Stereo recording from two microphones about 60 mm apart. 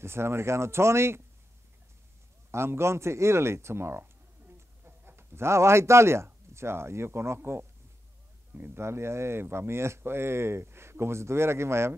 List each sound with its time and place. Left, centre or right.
0.0 s speech: right
2.5 s speech: right
4.0 s a sound: right
8.5 s speech: right